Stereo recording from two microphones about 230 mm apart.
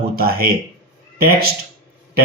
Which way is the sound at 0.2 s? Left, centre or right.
Right.